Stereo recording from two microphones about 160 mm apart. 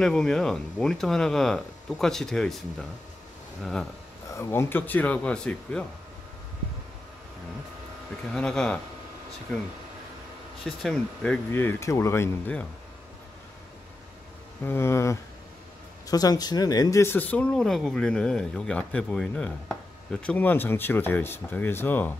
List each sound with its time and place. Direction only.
0.0 s speech: 5° left (ahead or behind)
4.4 s speech: 15° left (ahead or behind)
8.3 s speech: 5° left (ahead or behind)
11.5 s speech: 15° left (ahead or behind)
14.6 s speech: 15° left (ahead or behind)